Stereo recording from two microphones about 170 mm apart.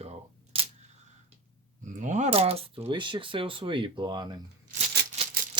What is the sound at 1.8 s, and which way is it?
Speech, 45° right (ahead or behind).